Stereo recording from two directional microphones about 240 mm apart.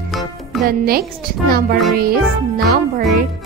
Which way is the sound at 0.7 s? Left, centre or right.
Right.